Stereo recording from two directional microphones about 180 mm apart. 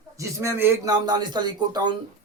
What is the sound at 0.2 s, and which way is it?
A man's voice, 15° right (ahead or behind).